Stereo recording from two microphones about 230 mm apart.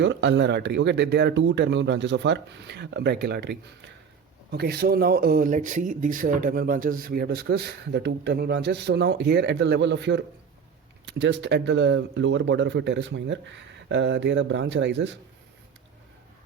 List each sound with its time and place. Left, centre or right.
0.0 s speech: right